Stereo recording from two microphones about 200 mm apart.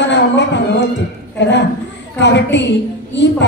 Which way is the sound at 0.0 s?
60° left (ahead or behind).